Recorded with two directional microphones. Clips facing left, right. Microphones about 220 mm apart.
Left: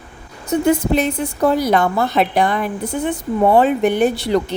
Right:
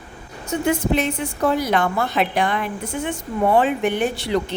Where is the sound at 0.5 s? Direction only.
40° left (ahead or behind).